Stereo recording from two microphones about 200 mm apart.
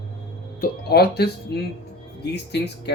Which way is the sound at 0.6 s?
50° left (ahead or behind).